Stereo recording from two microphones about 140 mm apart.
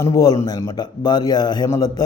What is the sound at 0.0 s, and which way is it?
Speech, 25° left (ahead or behind).